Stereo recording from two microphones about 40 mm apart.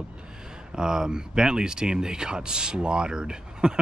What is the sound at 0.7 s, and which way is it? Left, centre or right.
Speech, centre.